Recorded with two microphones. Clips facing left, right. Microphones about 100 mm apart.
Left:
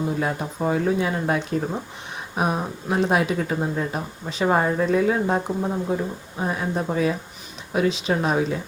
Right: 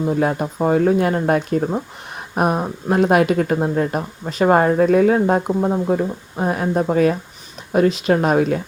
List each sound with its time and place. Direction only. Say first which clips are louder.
0.2 s speech: right 6 dB; 50° right (ahead or behind)